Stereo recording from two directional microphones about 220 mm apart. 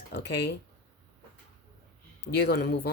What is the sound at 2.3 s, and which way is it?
Speech, 50° left (ahead or behind).